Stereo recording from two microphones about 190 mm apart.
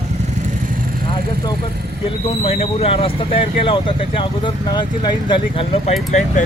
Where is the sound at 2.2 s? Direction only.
30° left (ahead or behind).